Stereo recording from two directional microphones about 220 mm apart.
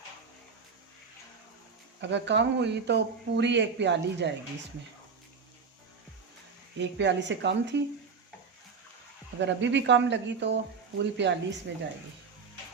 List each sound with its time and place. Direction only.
2.0 s speech: 55° right (ahead or behind)
6.7 s speech: 55° right (ahead or behind)
9.4 s speech: 55° right (ahead or behind)